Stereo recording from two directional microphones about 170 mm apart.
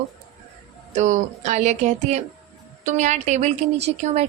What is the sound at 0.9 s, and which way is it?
A woman's voice, 45° right (ahead or behind).